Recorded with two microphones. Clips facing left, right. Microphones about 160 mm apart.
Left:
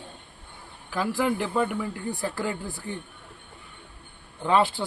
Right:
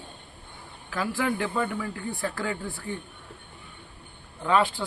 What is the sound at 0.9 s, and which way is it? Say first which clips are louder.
A man's voice: left 2 dB; 5° left (ahead or behind).